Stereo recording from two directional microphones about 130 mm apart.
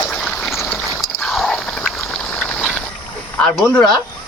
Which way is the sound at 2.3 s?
10° left (ahead or behind).